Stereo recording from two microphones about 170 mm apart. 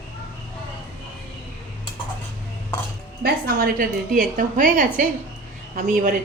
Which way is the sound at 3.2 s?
60° right (ahead or behind).